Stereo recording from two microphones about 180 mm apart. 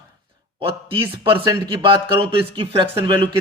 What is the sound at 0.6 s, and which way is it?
Speech, 30° right (ahead or behind).